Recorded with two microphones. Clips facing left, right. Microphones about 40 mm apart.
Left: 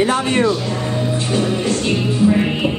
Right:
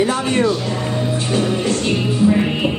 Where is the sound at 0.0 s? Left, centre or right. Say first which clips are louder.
Left 1 dB; left.